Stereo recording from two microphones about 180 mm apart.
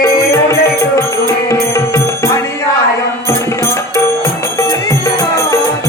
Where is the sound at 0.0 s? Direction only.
15° left (ahead or behind).